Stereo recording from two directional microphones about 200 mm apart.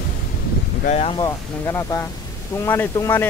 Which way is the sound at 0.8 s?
35° left (ahead or behind).